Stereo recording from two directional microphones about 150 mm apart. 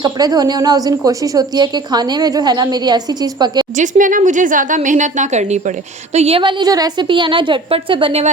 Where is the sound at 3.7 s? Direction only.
60° right (ahead or behind).